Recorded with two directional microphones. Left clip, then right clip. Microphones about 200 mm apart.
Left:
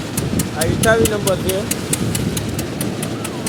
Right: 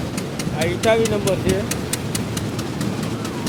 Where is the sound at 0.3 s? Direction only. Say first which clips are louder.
Left 2 dB; 50° left (ahead or behind).